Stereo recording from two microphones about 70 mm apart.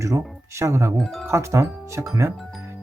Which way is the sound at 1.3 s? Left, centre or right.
Right.